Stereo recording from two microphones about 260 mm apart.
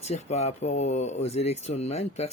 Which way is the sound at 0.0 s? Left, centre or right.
Left.